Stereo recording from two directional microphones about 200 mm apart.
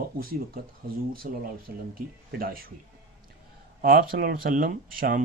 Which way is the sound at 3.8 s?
45° right (ahead or behind).